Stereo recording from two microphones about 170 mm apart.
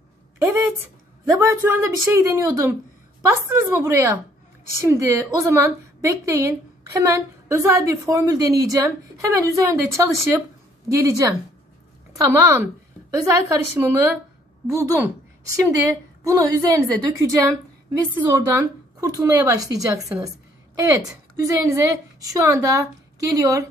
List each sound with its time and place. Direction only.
0.4 s a woman's voice: 15° right (ahead or behind)